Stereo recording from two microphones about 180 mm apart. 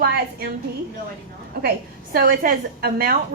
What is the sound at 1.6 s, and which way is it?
A woman's voice, 55° right (ahead or behind).